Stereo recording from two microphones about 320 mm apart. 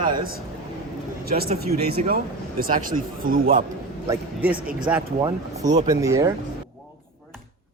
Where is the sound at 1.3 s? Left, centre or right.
Right.